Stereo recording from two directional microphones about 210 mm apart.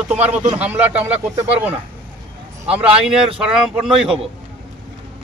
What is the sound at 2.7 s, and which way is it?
Speech, 5° right (ahead or behind).